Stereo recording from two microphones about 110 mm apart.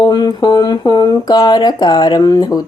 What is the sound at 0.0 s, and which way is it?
Speech, 40° left (ahead or behind).